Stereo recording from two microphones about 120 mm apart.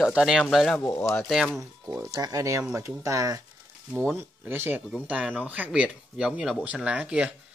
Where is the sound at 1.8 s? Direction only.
20° right (ahead or behind).